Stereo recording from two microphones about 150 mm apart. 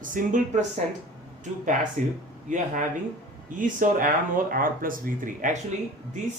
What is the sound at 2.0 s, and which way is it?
Speech, 55° right (ahead or behind).